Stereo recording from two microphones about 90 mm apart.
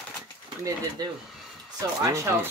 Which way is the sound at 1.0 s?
50° right (ahead or behind).